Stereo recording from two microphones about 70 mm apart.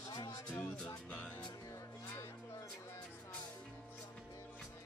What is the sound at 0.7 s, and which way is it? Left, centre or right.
Music, centre.